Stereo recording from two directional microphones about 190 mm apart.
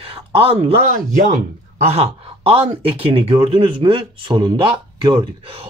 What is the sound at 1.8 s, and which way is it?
Speech, 30° right (ahead or behind).